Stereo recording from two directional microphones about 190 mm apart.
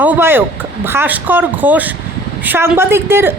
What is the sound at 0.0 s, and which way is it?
Speech, 10° right (ahead or behind).